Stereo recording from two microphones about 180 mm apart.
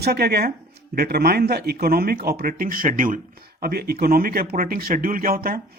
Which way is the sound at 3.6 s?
60° right (ahead or behind).